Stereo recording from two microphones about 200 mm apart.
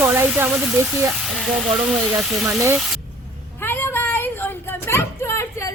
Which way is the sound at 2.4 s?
15° right (ahead or behind).